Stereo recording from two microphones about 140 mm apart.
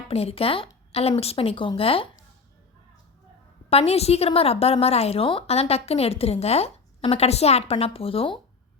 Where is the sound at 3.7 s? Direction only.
45° left (ahead or behind).